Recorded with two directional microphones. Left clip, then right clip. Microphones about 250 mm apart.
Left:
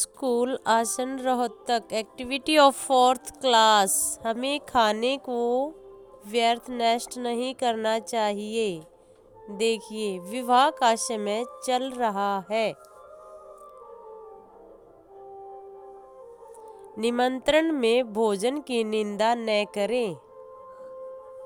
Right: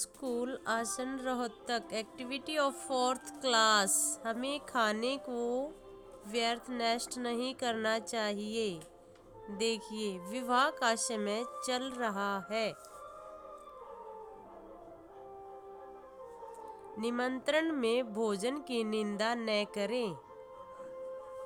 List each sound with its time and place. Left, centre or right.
0.0 s a woman's voice: left
17.0 s a woman's voice: left